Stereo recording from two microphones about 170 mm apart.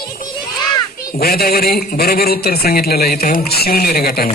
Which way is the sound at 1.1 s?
65° left (ahead or behind).